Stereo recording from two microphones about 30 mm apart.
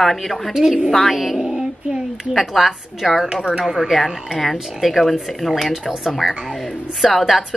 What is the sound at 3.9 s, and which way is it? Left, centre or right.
Speech, centre.